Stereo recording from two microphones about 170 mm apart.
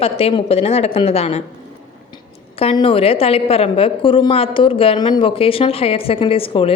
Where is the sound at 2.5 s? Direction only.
30° left (ahead or behind).